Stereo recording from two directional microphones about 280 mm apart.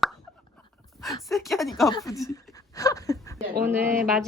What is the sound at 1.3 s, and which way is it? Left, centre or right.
Speech, centre.